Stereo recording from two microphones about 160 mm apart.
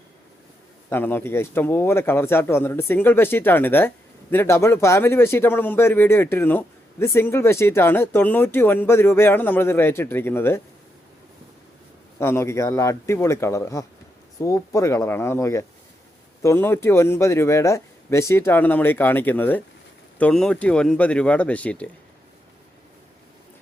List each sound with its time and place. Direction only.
0.9 s speech: 10° left (ahead or behind)
12.2 s speech: 15° left (ahead or behind)